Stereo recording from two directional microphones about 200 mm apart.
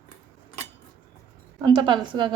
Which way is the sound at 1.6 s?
25° right (ahead or behind).